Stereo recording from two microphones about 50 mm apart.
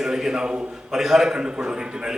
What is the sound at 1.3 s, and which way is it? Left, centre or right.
Speech, right.